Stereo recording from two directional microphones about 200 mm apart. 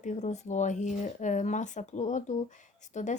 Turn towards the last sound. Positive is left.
turn(degrees=35)  # may be behind; listen again after turning